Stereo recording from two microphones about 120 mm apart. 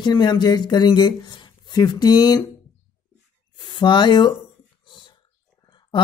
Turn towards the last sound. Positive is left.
turn(degrees=40)  # may be behind; listen again after turning